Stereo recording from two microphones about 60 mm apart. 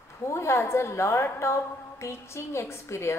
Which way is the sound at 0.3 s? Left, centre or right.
Left.